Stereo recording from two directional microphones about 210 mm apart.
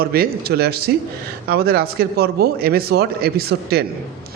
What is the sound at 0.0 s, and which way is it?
A man's voice, 45° right (ahead or behind).